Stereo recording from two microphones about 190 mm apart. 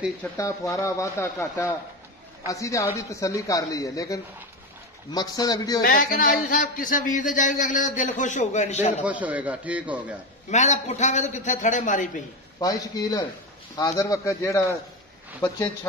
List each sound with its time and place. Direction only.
0.2 s a man's voice: 15° left (ahead or behind)
5.8 s a man's voice: 50° left (ahead or behind)
9.0 s a man's voice: 10° right (ahead or behind)
10.5 s a man's voice: 40° left (ahead or behind)
12.5 s a man's voice: 20° left (ahead or behind)